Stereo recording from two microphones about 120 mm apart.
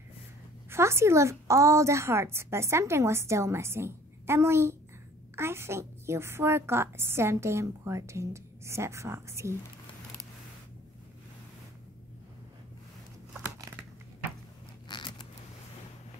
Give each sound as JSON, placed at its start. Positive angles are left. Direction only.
{"t": 0.7, "sound": "a woman's voice", "side_deg": -20}
{"t": 14.9, "sound": "scissors", "side_deg": 40}